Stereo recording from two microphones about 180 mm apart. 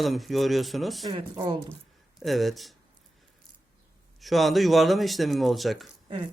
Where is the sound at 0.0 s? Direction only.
Centre (ahead or behind).